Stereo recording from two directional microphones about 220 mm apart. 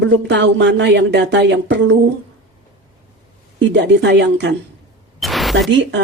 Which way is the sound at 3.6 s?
55° right (ahead or behind).